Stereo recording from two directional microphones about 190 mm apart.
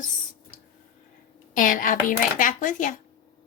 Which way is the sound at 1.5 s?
45° left (ahead or behind).